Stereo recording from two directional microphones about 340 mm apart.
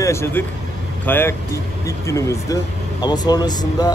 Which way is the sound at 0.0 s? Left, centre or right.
Centre.